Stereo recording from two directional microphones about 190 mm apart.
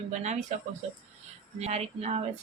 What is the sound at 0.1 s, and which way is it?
Speech, 35° right (ahead or behind).